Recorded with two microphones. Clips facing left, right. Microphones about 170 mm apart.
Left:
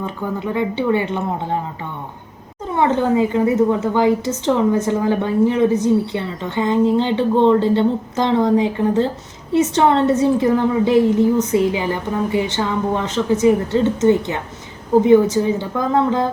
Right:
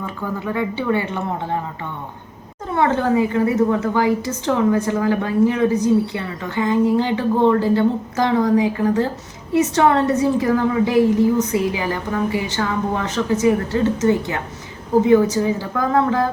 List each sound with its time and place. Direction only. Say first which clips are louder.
0.0 s a woman's voice: left 2 dB; 20° left (ahead or behind)
2.7 s a woman's voice: left 1 dB; 20° left (ahead or behind)